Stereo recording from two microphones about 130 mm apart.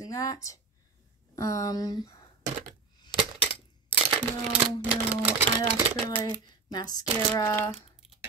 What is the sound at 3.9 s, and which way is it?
Coin, 45° right (ahead or behind).